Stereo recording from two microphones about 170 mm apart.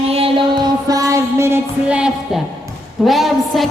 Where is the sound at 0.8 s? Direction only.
20° right (ahead or behind).